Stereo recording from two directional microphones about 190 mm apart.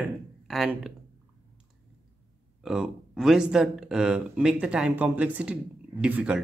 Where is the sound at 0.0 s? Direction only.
Centre (ahead or behind).